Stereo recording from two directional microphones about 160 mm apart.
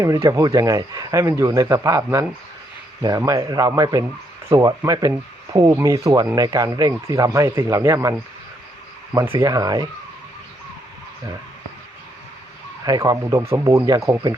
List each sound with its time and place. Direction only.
0.0 s speech: 20° right (ahead or behind)
9.4 s speech: 20° right (ahead or behind)
12.8 s speech: 20° right (ahead or behind)